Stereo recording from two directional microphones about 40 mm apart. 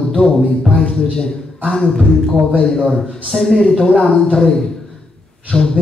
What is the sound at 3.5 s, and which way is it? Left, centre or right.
A man's voice, centre.